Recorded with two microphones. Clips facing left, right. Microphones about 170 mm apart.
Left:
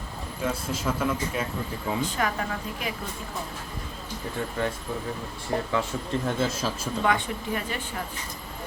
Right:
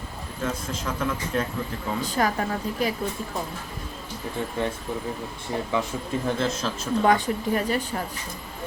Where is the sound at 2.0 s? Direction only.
40° right (ahead or behind).